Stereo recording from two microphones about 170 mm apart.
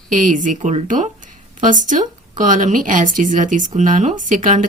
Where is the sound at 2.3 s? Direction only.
50° right (ahead or behind).